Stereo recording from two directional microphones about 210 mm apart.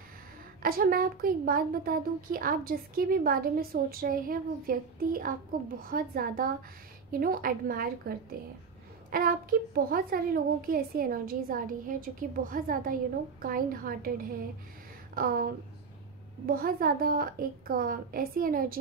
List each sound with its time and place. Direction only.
0.6 s a woman's voice: 45° right (ahead or behind)
15.1 s a woman's voice: 45° right (ahead or behind)